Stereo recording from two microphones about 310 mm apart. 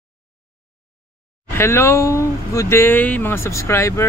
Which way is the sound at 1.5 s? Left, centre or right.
Centre.